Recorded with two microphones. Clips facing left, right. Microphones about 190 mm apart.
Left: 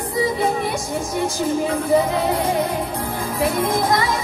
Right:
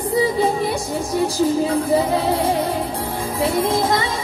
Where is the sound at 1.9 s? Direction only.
30° right (ahead or behind).